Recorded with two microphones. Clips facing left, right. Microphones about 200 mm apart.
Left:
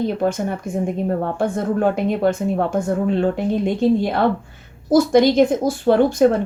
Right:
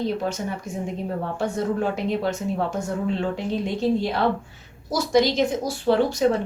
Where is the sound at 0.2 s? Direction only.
55° left (ahead or behind).